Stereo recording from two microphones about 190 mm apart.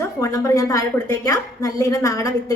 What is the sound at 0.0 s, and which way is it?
A woman's voice, 15° left (ahead or behind).